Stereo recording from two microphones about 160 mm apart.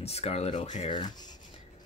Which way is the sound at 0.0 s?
40° left (ahead or behind).